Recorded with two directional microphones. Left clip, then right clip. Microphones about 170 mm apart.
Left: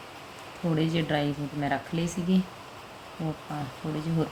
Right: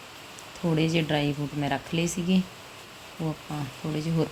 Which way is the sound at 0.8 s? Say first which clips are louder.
Right 2 dB; 10° right (ahead or behind).